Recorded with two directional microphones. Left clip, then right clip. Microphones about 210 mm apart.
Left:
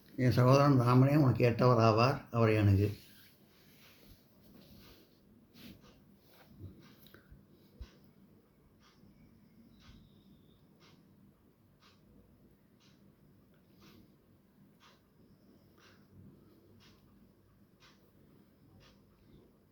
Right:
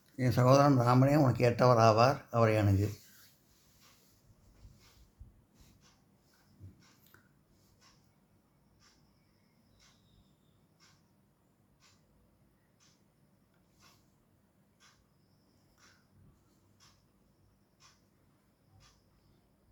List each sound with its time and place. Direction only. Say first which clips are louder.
0.2 s speech: right 2 dB; 25° right (ahead or behind)